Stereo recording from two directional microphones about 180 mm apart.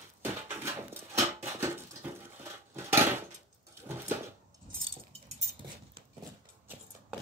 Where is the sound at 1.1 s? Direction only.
15° right (ahead or behind).